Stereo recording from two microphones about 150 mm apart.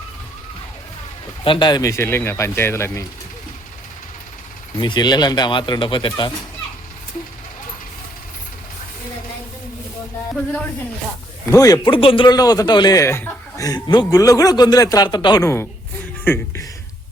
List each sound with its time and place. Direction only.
1.5 s speech: 30° left (ahead or behind)
4.8 s speech: 30° left (ahead or behind)
11.5 s speech: 25° left (ahead or behind)
11.9 s speech: 35° left (ahead or behind)
16.2 s speech: 15° left (ahead or behind)